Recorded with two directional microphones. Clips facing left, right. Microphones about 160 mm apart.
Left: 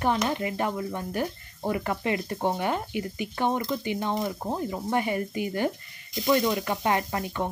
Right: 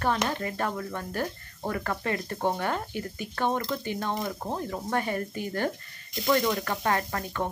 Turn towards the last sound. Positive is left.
turn(degrees=15)  # may be behind; listen again after turning